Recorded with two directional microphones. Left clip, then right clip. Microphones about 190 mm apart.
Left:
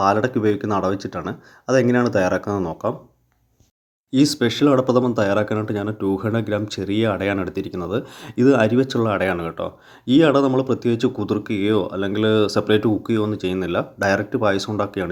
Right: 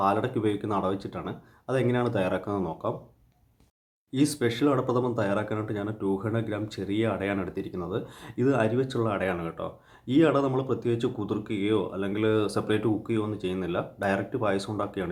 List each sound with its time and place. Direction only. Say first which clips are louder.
0.0 s speech: left 7 dB; 35° left (ahead or behind)
4.1 s speech: left 8 dB; 35° left (ahead or behind)